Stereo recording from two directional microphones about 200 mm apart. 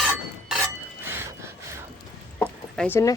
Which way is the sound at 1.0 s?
10° right (ahead or behind).